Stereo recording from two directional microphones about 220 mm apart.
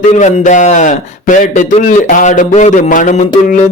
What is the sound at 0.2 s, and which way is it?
Speech, 35° left (ahead or behind).